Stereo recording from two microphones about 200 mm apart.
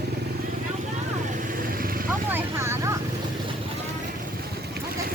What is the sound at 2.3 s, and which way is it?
Speech, 10° right (ahead or behind).